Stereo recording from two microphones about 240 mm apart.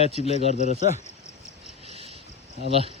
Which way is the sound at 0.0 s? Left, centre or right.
Left.